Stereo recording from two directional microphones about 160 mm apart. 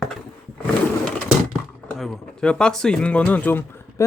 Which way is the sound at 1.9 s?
Centre (ahead or behind).